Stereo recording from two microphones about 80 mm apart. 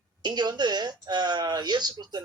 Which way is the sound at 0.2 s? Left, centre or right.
Right.